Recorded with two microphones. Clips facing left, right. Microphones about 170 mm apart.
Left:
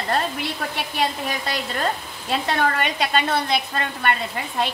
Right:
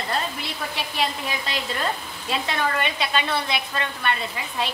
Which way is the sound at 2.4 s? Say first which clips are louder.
Left 3 dB; 50° left (ahead or behind).